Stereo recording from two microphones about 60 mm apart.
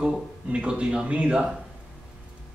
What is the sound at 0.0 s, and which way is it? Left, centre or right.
Speech, centre.